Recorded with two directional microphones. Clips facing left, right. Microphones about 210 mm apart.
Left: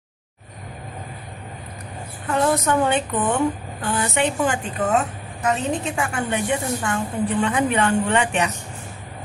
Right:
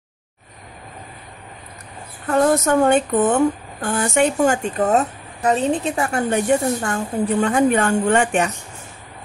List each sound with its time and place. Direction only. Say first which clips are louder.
2.2 s a woman's voice: right 4 dB; 45° right (ahead or behind)